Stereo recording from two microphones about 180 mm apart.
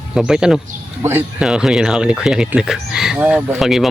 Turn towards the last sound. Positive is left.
turn(degrees=0)  # may be behind; listen again after turning